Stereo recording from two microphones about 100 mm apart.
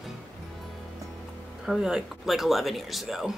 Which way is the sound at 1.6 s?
5° right (ahead or behind).